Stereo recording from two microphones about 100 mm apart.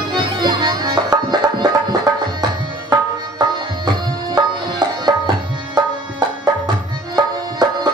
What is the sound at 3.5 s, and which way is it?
Tabla, 45° right (ahead or behind).